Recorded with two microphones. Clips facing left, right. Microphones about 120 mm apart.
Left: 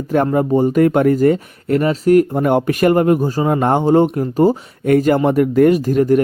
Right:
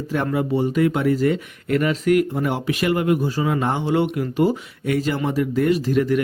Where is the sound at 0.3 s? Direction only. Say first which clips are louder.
Left 6 dB; 45° left (ahead or behind).